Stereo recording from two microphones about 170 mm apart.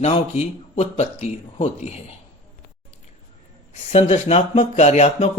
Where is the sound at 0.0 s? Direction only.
40° left (ahead or behind).